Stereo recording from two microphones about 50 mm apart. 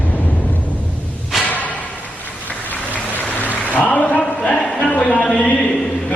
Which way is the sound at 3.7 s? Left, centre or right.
Left.